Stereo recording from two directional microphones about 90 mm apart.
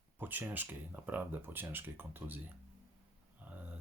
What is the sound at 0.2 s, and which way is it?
Speech, 20° right (ahead or behind).